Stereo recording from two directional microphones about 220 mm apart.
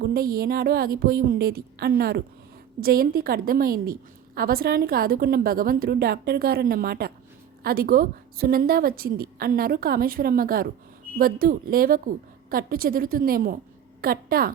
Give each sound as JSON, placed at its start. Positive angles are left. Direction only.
{"t": 0.0, "sound": "a woman's voice", "side_deg": -45}